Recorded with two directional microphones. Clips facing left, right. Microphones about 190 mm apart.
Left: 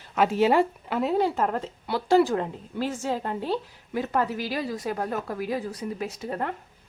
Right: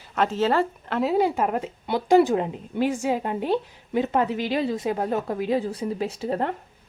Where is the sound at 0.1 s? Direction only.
10° left (ahead or behind).